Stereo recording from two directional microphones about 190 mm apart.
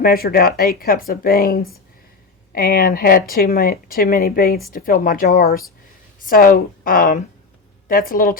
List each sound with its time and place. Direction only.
0.0 s speech: 50° left (ahead or behind)